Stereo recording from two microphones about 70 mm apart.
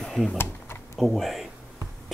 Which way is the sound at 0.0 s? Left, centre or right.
Centre.